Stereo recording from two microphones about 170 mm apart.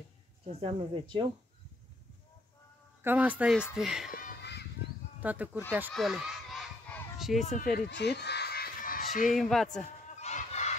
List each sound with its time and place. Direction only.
0.6 s speech: 35° right (ahead or behind)
3.0 s speech: 10° right (ahead or behind)
4.1 s a sound: 75° left (ahead or behind)
5.2 s speech: 10° right (ahead or behind)
5.9 s a sound: 5° right (ahead or behind)
7.4 s speech: 50° left (ahead or behind)
7.9 s honk: 80° left; by 9.0 s 60° left (ahead or behind)
9.3 s speech: centre (ahead or behind)
10.1 s battle cry: 40° left (ahead or behind)